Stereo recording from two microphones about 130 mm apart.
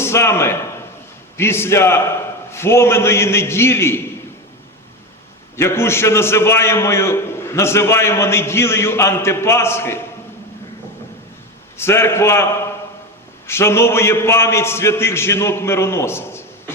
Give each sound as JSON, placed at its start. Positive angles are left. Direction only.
{"t": 0.0, "sound": "a man's voice", "side_deg": 20}
{"t": 5.5, "sound": "a man's voice", "side_deg": 20}
{"t": 11.8, "sound": "a man's voice", "side_deg": 20}